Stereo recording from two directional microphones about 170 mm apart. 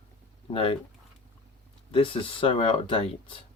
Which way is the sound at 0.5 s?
35° left (ahead or behind).